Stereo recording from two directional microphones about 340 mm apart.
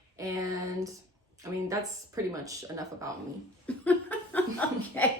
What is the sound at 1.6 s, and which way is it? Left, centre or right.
Speech, centre.